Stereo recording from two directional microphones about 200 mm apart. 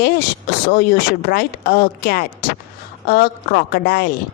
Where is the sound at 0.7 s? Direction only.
45° left (ahead or behind).